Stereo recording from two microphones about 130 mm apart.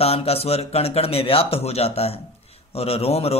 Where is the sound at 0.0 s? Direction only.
50° left (ahead or behind).